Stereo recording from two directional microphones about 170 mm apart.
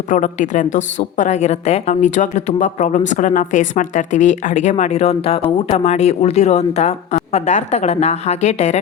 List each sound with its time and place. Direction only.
0.1 s a woman's voice: 50° left (ahead or behind)